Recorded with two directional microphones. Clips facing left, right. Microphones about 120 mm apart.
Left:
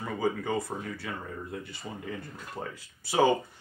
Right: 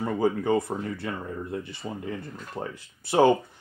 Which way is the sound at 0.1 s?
60° right (ahead or behind).